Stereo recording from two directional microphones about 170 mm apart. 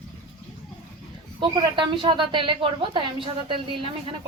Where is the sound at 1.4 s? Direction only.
30° right (ahead or behind).